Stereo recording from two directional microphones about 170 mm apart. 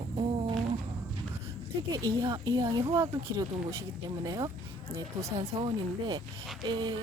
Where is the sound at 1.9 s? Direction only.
20° right (ahead or behind).